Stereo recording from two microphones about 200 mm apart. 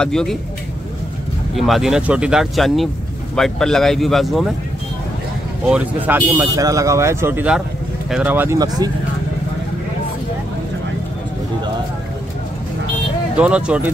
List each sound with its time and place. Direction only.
0.0 s speech: 5° left (ahead or behind)
1.5 s speech: centre (ahead or behind)
5.7 s speech: 5° right (ahead or behind)
8.5 s speech: 20° right (ahead or behind)
13.4 s speech: 5° right (ahead or behind)